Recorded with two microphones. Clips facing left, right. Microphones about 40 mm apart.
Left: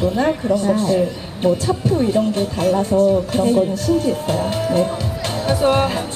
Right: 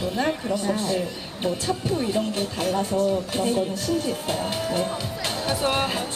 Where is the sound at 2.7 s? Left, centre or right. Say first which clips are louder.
Left 8 dB; centre.